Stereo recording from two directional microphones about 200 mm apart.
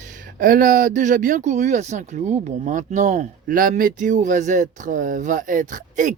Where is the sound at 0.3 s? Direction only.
45° right (ahead or behind).